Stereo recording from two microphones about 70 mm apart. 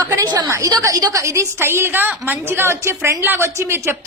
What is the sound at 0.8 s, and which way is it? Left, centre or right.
A woman's voice, right.